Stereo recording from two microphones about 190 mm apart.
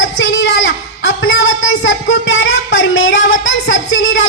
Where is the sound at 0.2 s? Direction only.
80° left.